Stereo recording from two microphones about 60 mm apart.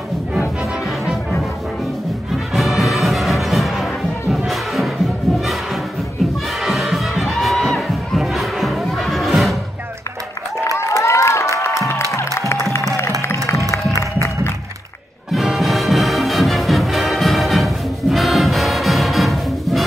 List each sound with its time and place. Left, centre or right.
2.5 s music: centre
6.6 s music: centre
10.8 s a sound: left
11.5 s music: left
13.7 s music: left
15.3 s music: centre